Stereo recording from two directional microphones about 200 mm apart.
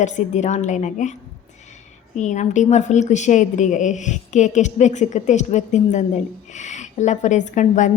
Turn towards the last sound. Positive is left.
turn(degrees=40)  # may be behind; listen again after turning